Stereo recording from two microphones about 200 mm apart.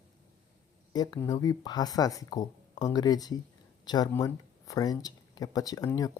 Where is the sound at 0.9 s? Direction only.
20° left (ahead or behind).